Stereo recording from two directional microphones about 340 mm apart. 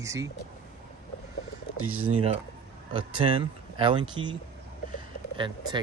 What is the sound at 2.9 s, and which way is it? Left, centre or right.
Speech, centre.